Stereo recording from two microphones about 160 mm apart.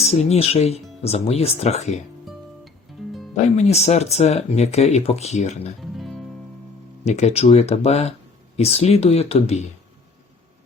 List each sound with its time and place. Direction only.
0.0 s speech: 40° left (ahead or behind)
3.3 s speech: 45° left (ahead or behind)
5.8 s music: centre (ahead or behind)
7.0 s speech: 45° left (ahead or behind)